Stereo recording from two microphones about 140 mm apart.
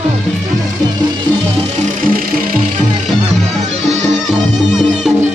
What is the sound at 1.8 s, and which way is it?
Music, 80° right.